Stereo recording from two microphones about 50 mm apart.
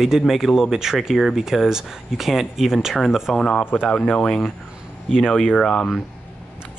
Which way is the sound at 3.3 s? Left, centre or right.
Centre.